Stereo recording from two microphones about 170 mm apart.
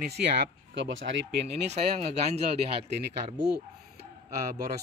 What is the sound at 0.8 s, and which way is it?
Speech, 90° right.